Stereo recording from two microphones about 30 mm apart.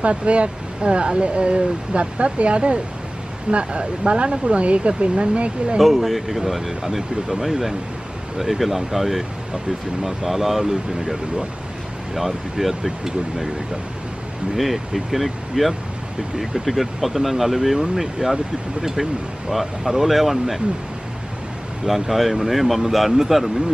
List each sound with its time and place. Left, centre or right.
0.0 s speech: right
5.8 s speech: centre
12.2 s speech: centre
14.5 s speech: centre
21.8 s speech: centre